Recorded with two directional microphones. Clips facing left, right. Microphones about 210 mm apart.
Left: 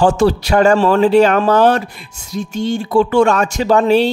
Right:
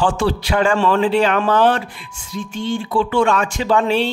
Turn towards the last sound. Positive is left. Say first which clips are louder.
# left 5 dB
turn(degrees=40)  # may be behind; listen again after turning